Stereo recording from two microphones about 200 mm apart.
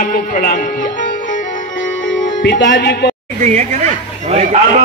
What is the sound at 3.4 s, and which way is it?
Speech, 35° right (ahead or behind).